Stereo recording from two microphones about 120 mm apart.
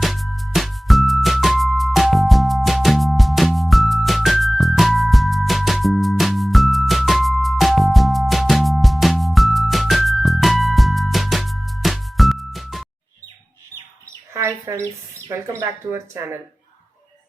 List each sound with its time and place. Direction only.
0.0 s music: centre (ahead or behind)
14.3 s speech: 20° right (ahead or behind)